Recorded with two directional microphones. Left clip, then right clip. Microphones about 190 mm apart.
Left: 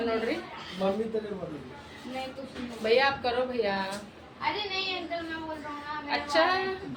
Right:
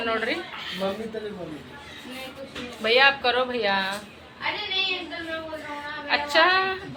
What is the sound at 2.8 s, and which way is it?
A woman's voice, centre (ahead or behind).